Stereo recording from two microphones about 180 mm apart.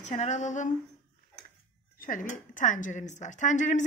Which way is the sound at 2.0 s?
45° left (ahead or behind).